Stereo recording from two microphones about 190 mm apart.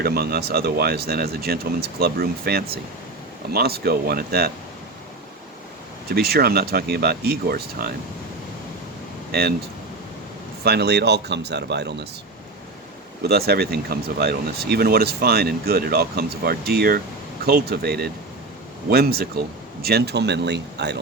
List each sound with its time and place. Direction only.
0.0 s speech: 55° right (ahead or behind)
6.1 s speech: 55° right (ahead or behind)
9.3 s speech: 55° right (ahead or behind)
10.6 s speech: 60° right (ahead or behind)
13.2 s speech: 55° right (ahead or behind)